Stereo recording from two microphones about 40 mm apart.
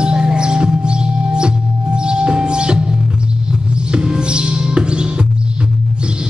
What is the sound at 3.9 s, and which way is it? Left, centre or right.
Music, right.